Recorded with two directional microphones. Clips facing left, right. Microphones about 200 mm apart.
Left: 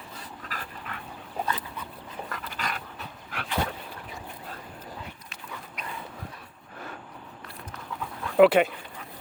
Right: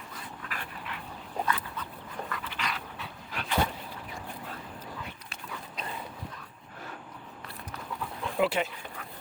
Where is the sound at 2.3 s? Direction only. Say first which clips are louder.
Left 2 dB; 45° left (ahead or behind).